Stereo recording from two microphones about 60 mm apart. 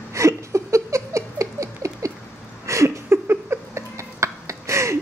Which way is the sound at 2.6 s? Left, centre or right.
Right.